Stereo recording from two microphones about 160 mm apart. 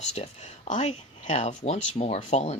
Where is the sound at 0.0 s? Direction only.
45° left (ahead or behind).